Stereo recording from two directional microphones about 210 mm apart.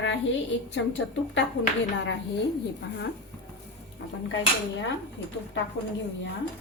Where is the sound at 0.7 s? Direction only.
60° left (ahead or behind).